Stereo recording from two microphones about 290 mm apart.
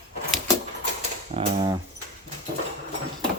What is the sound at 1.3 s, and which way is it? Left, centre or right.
Typing, right.